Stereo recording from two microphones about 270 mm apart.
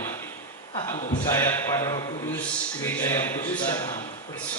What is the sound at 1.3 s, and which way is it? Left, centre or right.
A man's voice, centre.